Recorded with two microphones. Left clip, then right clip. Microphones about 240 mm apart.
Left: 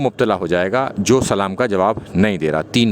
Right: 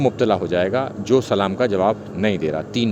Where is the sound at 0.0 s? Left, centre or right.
Left.